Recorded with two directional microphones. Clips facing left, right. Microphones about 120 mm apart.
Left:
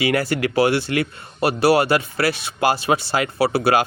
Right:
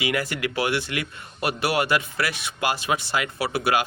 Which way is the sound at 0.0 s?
35° left (ahead or behind).